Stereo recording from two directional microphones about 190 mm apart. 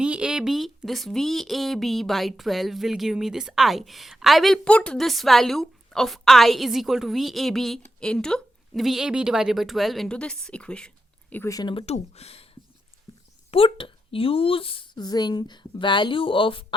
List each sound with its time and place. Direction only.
0.0 s speech: 5° right (ahead or behind); by 12.5 s 30° left (ahead or behind)
13.5 s a woman's voice: 30° left (ahead or behind)